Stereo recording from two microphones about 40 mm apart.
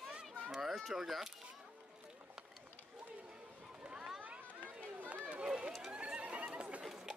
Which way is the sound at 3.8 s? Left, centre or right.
Right.